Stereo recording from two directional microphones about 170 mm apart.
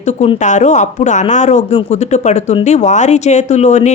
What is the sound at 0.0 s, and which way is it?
A woman's voice, 40° left (ahead or behind).